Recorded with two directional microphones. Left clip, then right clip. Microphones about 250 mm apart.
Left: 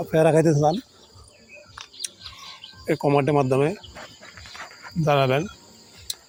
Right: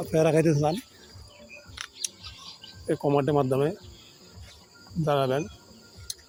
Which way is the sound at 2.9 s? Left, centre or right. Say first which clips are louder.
Left 4 dB; centre.